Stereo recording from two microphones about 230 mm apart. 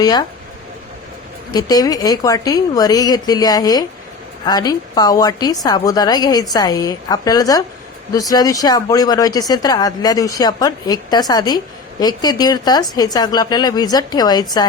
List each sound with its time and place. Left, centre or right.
0.0 s speech: centre
1.5 s speech: centre